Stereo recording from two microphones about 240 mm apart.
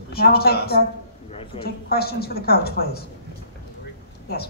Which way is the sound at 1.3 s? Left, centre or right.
Left.